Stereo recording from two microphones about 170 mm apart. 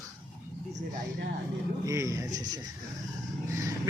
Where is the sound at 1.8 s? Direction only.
20° right (ahead or behind).